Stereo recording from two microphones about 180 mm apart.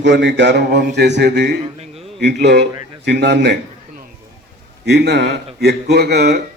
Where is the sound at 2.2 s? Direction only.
70° right (ahead or behind).